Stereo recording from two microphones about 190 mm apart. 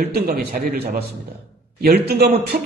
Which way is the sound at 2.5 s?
45° right (ahead or behind).